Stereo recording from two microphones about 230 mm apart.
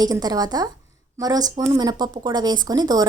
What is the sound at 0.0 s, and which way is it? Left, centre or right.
A woman's voice, centre.